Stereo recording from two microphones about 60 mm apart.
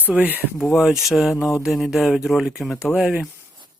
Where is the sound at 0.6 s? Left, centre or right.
Centre.